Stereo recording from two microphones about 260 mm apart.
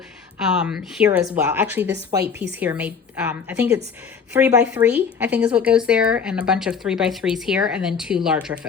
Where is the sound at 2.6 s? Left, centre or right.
Centre.